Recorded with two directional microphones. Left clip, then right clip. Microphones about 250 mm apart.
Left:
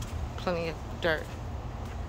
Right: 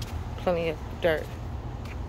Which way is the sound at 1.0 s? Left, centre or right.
Centre.